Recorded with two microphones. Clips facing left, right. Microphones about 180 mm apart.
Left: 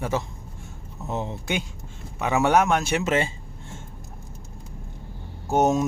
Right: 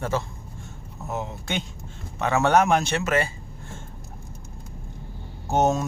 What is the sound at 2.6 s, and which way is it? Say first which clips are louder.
Speech: right 2 dB; centre (ahead or behind).